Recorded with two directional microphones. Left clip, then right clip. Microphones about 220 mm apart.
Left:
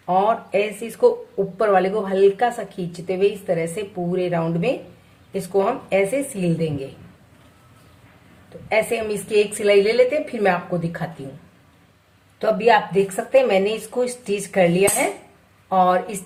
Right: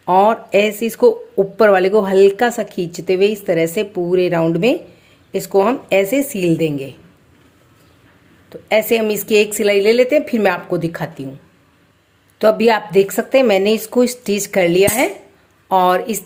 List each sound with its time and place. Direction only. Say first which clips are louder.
0.0 s a sound: right 6 dB; 45° right (ahead or behind)
1.5 s speech: right 6 dB; 45° right (ahead or behind)
8.7 s speech: right 6 dB; 45° right (ahead or behind)
12.4 s speech: right 4 dB; 45° right (ahead or behind)